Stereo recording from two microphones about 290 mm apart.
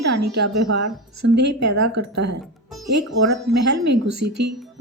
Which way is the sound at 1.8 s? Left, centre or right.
Right.